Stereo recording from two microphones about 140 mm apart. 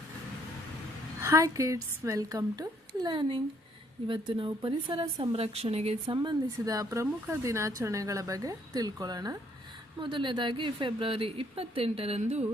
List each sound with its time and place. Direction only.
1.2 s a woman's voice: 20° right (ahead or behind); by 6.1 s 45° right (ahead or behind)
6.1 s a woman's voice: 30° right (ahead or behind); by 12.5 s 50° right (ahead or behind)